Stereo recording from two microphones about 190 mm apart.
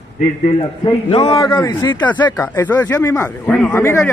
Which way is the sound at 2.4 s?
10° left (ahead or behind).